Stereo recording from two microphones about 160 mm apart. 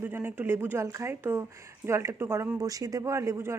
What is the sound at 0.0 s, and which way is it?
Speech, 15° right (ahead or behind).